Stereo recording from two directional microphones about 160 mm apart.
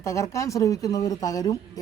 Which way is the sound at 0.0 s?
20° left (ahead or behind).